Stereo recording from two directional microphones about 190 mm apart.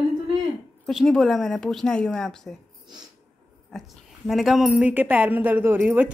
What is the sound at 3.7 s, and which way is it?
A woman's voice, centre (ahead or behind).